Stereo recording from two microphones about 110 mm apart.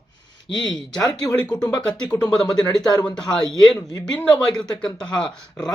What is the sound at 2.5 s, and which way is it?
Speech, 5° left (ahead or behind).